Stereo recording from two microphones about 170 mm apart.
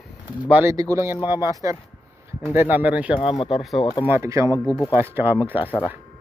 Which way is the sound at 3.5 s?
Centre (ahead or behind).